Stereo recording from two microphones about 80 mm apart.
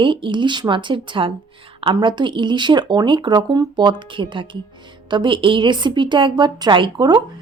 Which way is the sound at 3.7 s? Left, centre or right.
Right.